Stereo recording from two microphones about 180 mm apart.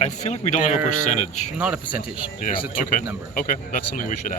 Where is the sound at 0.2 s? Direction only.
40° left (ahead or behind).